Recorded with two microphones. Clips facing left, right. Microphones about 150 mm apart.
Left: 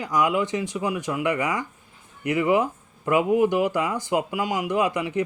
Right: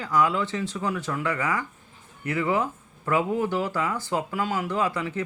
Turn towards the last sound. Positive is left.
turn(degrees=15)  # may be behind; listen again after turning